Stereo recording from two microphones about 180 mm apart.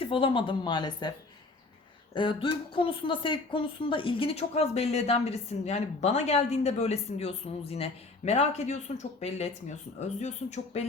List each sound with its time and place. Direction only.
0.0 s speech: 30° left (ahead or behind)
2.1 s speech: 30° left (ahead or behind)